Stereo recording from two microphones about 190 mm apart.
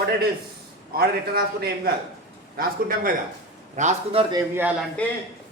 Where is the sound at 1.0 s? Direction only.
55° right (ahead or behind).